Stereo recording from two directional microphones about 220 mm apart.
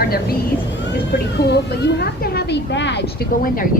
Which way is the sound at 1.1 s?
50° left (ahead or behind).